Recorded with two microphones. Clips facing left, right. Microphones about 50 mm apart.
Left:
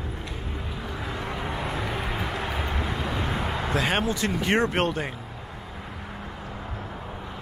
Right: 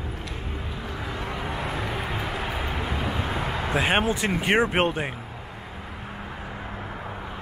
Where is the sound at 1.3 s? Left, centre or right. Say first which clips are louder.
Even; centre.